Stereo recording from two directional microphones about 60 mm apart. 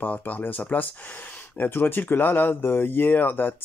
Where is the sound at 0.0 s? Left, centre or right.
Left.